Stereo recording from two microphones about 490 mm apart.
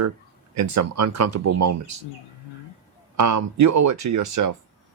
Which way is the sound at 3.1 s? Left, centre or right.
Right.